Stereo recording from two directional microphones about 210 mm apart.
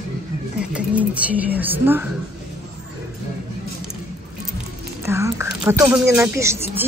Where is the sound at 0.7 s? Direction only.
5° right (ahead or behind).